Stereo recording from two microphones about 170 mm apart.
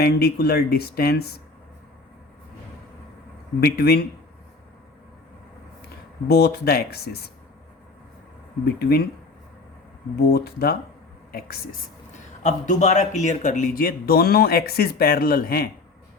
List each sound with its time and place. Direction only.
0.0 s speech: 65° left (ahead or behind)
3.6 s speech: 65° left (ahead or behind)
6.2 s speech: 70° left (ahead or behind)
8.6 s speech: 65° left (ahead or behind)
10.2 s speech: 70° left (ahead or behind)
12.4 s speech: 45° left (ahead or behind); by 15.7 s 60° left (ahead or behind)